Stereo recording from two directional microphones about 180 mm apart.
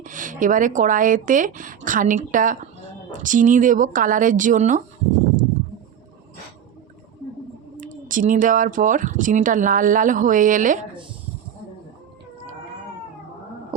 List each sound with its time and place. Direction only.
0.0 s speech: 45° right (ahead or behind)
7.8 s speech: 45° right (ahead or behind)